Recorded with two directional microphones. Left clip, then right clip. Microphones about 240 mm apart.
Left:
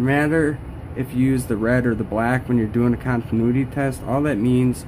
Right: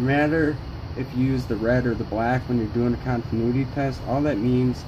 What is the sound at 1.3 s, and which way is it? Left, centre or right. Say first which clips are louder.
Speech: left 1 dB; left.